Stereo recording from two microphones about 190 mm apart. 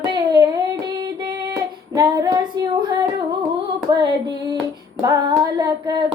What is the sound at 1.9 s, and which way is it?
Female singing, 20° right (ahead or behind).